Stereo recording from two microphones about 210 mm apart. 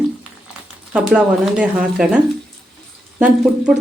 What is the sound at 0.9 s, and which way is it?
Speech, 5° right (ahead or behind).